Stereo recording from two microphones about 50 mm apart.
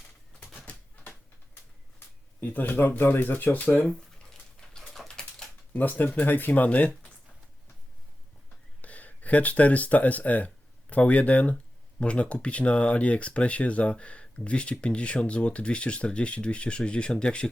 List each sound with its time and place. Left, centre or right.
0.3 s typewriter: left
2.4 s speech: left
4.3 s dog: centre
5.4 s a sound: centre
5.7 s speech: left
8.8 s speech: left